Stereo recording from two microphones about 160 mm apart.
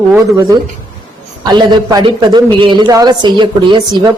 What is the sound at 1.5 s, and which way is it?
Speech, 25° right (ahead or behind).